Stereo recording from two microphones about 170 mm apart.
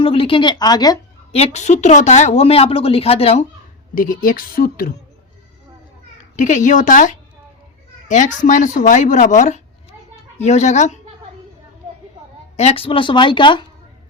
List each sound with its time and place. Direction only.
0.0 s a woman's voice: 30° left (ahead or behind)
1.3 s a woman's voice: 40° left (ahead or behind)
3.9 s a woman's voice: 50° left (ahead or behind)
6.3 s speech: 45° left (ahead or behind)
12.5 s a woman's voice: 35° left (ahead or behind)